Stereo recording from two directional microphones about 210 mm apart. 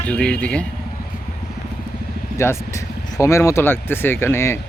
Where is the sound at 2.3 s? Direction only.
15° left (ahead or behind).